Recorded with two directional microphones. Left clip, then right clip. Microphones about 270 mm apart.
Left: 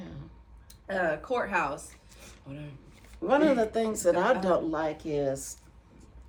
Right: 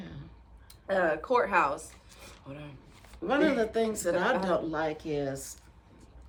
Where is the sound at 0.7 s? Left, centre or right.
Centre.